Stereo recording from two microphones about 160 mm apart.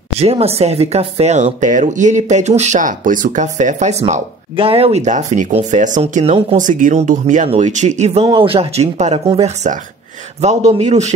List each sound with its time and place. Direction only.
0.2 s speech: 40° right (ahead or behind)